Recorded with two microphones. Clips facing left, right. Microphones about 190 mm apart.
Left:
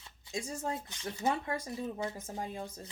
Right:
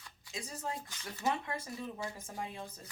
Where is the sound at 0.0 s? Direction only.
30° left (ahead or behind).